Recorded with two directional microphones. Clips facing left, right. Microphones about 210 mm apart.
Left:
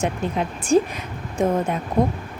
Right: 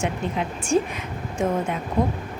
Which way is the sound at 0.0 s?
35° left (ahead or behind).